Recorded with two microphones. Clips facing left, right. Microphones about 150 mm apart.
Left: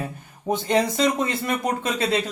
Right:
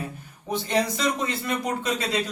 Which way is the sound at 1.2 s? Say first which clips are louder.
Left 2 dB; 50° left (ahead or behind).